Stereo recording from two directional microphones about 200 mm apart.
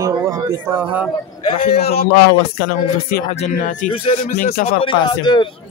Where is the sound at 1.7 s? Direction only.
50° left (ahead or behind).